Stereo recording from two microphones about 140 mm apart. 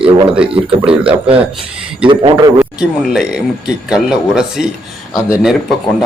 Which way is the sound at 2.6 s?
5° right (ahead or behind).